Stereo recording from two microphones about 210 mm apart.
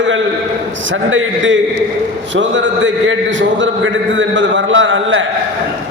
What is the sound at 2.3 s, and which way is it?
A man's voice, 65° right (ahead or behind).